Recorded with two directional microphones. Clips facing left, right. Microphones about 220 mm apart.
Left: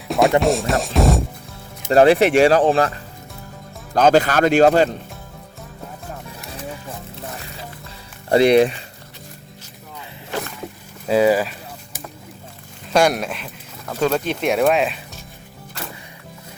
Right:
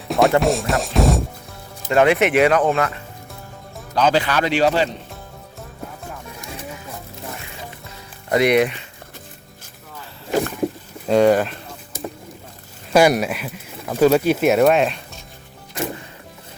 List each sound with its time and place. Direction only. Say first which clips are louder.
0.1 s speech: even; centre (ahead or behind)
1.9 s speech: left 3 dB; 35° left (ahead or behind)
3.9 s speech: left 4 dB; 45° left (ahead or behind)
8.3 s speech: left 3 dB; 30° left (ahead or behind)
11.1 s speech: right 1 dB; 5° left (ahead or behind)
12.9 s speech: right 3 dB; 5° right (ahead or behind)